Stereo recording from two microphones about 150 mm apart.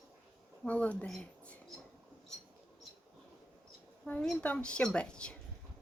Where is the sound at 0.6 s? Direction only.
10° left (ahead or behind).